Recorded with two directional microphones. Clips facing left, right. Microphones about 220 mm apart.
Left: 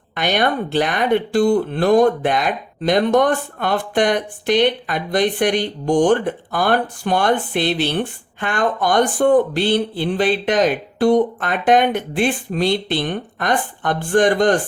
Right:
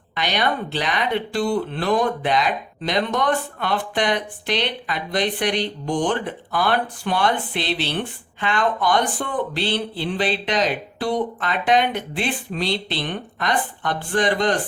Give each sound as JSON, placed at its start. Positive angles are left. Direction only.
{"t": 0.1, "sound": "speech", "side_deg": 50}